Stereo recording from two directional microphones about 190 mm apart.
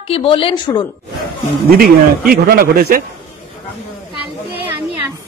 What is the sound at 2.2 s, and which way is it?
Speech, 50° right (ahead or behind).